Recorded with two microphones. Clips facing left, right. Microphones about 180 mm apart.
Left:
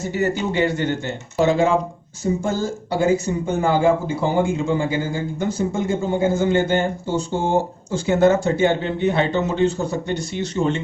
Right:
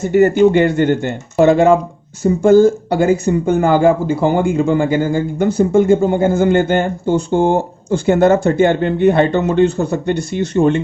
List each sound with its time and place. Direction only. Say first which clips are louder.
0.0 s speech: right 11 dB; 55° right (ahead or behind)